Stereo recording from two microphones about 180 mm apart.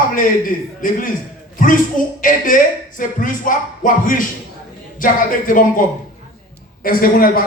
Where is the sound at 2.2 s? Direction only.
50° left (ahead or behind).